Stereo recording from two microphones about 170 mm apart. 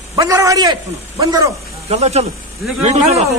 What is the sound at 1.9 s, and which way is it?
A man's voice, 40° right (ahead or behind).